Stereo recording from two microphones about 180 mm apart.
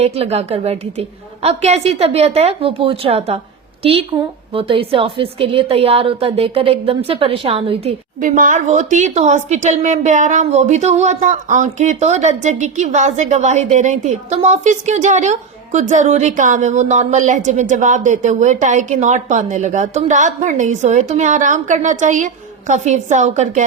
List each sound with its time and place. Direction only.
0.0 s a woman's voice: 35° right (ahead or behind)
4.5 s a woman's voice: 30° right (ahead or behind)
8.2 s a woman's voice: 45° right (ahead or behind)